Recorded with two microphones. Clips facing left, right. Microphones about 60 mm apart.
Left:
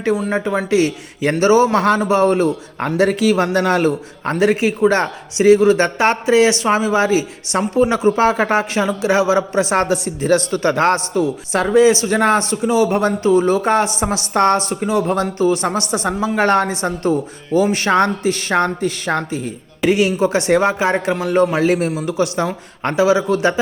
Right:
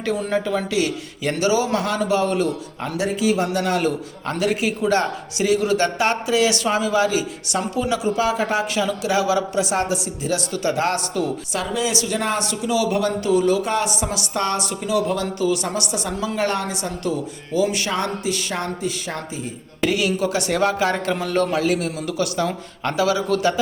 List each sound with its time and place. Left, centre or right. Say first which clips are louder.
0.3 s speech: left 4 dB; left
3.0 s a man's voice: left 5 dB; left
3.6 s speech: left 5 dB; left
10.9 s speech: left 5 dB; left
11.5 s speech: left 13 dB; left
19.9 s speech: left 7 dB; left